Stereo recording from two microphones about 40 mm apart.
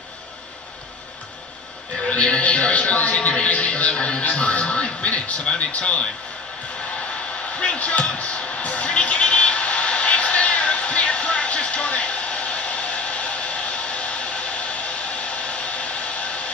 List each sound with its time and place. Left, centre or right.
2.0 s a man's voice: left
7.5 s a man's voice: left
8.0 s music: left
15.2 s hair dryer: left